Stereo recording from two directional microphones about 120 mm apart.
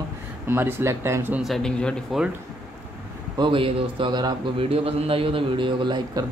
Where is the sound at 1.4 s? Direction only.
5° left (ahead or behind).